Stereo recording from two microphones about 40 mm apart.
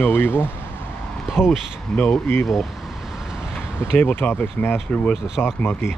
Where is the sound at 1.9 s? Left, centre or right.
Centre.